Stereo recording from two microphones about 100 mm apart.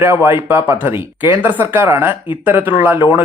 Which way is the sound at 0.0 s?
25° right (ahead or behind).